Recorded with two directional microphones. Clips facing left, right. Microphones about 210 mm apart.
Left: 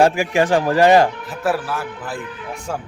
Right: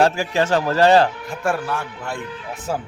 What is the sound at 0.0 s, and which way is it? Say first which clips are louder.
Speech: left 3 dB; 15° left (ahead or behind).